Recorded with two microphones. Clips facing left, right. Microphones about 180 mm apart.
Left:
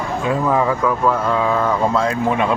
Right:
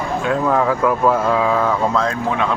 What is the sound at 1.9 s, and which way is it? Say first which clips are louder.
Speech: left 2 dB; 5° left (ahead or behind).